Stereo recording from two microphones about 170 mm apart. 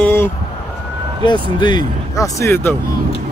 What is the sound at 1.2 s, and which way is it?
Speech, 25° left (ahead or behind).